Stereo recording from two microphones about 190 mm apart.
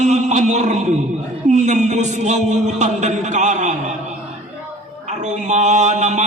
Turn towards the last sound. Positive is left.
turn(degrees=-35)  # may be behind; listen again after turning